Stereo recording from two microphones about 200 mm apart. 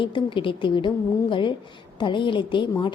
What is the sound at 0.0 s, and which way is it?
A woman's voice, 25° left (ahead or behind).